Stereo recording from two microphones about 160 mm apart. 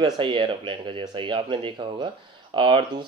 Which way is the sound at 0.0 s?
30° right (ahead or behind).